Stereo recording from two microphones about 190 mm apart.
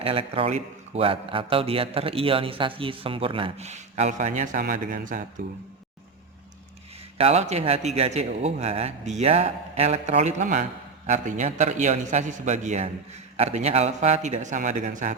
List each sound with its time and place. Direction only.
0.0 s a man's voice: 30° right (ahead or behind)
7.2 s a man's voice: 35° right (ahead or behind)